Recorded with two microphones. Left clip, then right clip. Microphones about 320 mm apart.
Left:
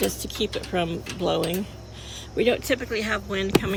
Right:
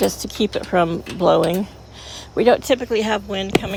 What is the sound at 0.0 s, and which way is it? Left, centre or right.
Speech, right.